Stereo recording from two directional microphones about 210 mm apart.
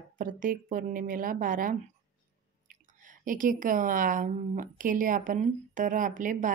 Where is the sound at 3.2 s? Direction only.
40° right (ahead or behind).